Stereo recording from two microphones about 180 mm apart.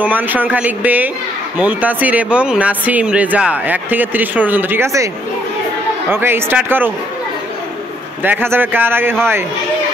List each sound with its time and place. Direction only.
0.0 s speech: 10° right (ahead or behind)
8.2 s speech: 10° right (ahead or behind)